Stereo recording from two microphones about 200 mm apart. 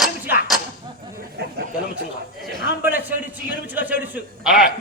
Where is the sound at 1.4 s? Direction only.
55° right (ahead or behind).